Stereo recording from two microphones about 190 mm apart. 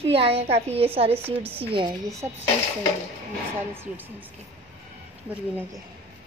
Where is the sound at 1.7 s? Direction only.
25° right (ahead or behind).